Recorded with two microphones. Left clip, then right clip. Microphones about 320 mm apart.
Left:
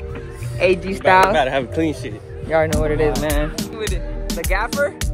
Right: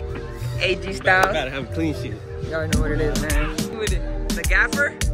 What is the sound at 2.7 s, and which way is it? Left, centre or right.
Speech, centre.